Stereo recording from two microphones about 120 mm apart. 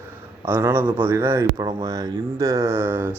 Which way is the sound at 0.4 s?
20° right (ahead or behind).